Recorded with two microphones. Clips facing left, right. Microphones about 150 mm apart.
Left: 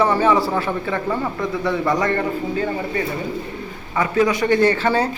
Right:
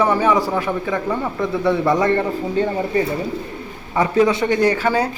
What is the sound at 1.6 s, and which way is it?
A man's voice, 25° right (ahead or behind).